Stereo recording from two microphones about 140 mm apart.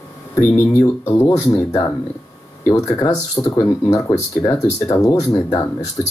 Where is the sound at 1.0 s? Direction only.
20° left (ahead or behind).